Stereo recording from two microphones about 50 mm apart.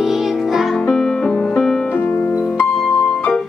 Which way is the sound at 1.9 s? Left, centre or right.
Left.